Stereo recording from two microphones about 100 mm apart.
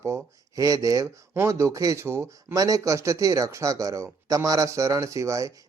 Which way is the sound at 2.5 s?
35° right (ahead or behind).